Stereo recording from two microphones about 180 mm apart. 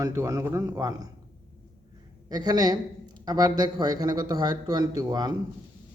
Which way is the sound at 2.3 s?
20° right (ahead or behind).